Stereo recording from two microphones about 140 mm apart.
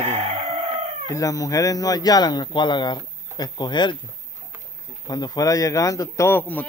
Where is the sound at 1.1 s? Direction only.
25° left (ahead or behind).